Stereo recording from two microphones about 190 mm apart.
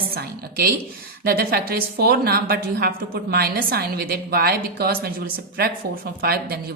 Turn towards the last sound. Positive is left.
turn(degrees=-55)  # may be behind; listen again after turning